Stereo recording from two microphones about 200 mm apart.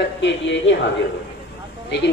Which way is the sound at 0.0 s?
65° left (ahead or behind).